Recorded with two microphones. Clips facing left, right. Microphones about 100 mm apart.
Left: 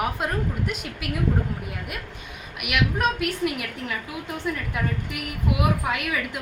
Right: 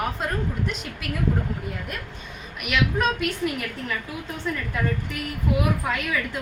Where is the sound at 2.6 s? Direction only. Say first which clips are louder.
Right 1 dB; 10° left (ahead or behind).